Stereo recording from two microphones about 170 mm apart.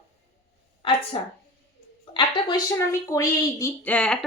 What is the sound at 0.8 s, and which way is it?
A woman's voice, 30° left (ahead or behind).